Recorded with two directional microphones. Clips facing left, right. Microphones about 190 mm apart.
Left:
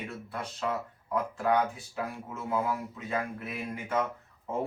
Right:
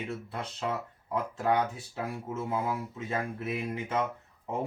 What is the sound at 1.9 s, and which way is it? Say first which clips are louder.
Speech: right 2 dB; 25° right (ahead or behind).